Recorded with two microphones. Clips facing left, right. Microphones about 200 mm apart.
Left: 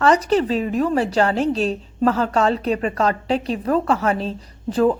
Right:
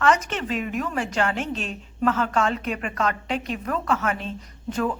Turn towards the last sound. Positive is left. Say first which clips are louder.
# left 8 dB
turn(degrees=35)  # may be behind; listen again after turning